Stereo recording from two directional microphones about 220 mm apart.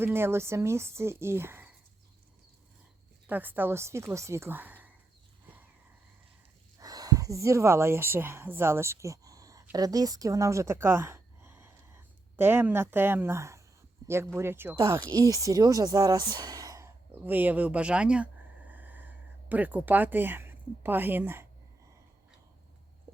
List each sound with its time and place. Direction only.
0.0 s speech: 10° right (ahead or behind)
3.2 s speech: 10° right (ahead or behind)
6.7 s speech: 15° right (ahead or behind)
14.0 s a sound: 15° right (ahead or behind)
14.3 s speech: 10° right (ahead or behind)
14.8 s speech: 20° right (ahead or behind)